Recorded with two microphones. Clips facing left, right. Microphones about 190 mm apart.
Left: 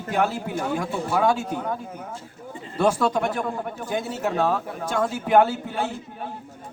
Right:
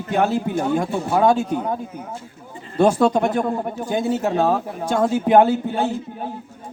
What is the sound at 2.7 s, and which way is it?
A man's voice, 30° right (ahead or behind).